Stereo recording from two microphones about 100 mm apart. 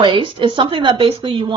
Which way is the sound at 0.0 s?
55° right (ahead or behind).